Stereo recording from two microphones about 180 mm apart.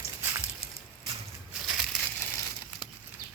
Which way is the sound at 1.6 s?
Centre (ahead or behind).